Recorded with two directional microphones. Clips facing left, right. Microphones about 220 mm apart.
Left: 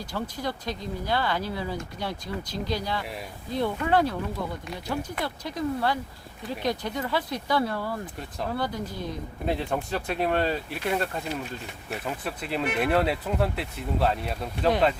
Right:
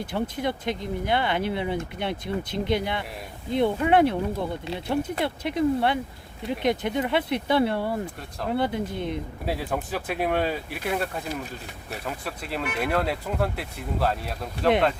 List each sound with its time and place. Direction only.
0.0 s speech: 25° right (ahead or behind)
9.5 s speech: 5° right (ahead or behind)